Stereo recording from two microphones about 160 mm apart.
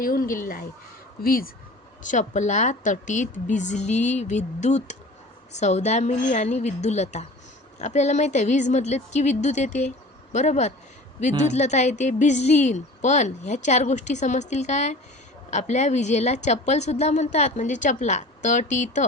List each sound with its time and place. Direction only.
0.0 s speech: 65° left (ahead or behind)
2.0 s a woman's voice: 50° left (ahead or behind)